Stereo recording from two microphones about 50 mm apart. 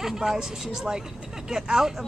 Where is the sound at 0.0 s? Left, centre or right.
Centre.